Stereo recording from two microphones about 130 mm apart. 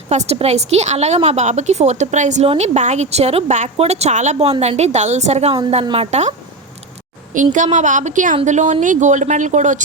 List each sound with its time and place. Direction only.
0.1 s a woman's voice: 60° right (ahead or behind)
5.8 s speech: 45° right (ahead or behind)
7.5 s speech: 75° right (ahead or behind)
8.4 s speech: 65° right (ahead or behind)